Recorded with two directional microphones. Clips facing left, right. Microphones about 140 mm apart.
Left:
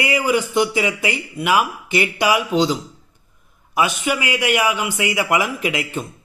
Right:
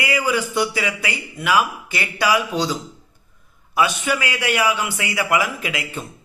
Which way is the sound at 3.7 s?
15° left (ahead or behind).